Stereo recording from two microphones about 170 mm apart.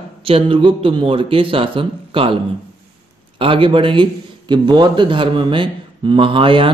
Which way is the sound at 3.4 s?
30° right (ahead or behind).